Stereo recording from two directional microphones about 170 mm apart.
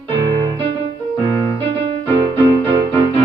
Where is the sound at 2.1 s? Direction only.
25° right (ahead or behind).